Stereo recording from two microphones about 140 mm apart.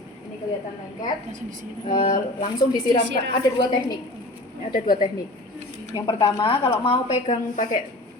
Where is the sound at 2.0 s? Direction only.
70° left (ahead or behind).